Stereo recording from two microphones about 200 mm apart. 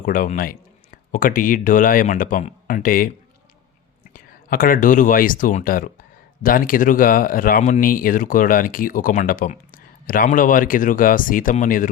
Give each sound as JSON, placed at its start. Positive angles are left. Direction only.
{"t": 0.0, "sound": "speech", "side_deg": 45}
{"t": 4.1, "sound": "speech", "side_deg": 45}